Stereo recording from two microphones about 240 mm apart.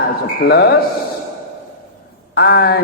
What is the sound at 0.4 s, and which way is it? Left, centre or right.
Speech, left.